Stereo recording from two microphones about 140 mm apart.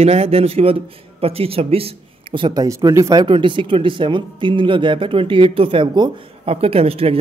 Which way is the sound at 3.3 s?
35° right (ahead or behind).